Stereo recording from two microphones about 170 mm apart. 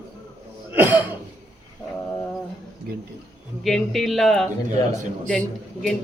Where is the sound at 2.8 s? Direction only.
65° right (ahead or behind).